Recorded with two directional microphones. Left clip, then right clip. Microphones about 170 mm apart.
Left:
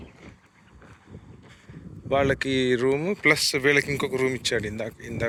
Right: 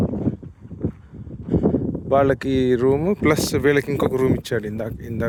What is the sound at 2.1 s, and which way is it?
Speech, 50° right (ahead or behind).